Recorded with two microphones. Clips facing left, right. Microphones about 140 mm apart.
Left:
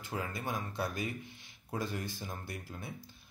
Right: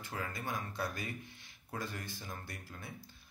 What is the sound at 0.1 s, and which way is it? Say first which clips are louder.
A man's voice: left 3 dB; 15° left (ahead or behind).